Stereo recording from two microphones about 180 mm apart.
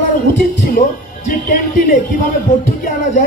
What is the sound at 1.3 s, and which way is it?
Speech, 50° left (ahead or behind).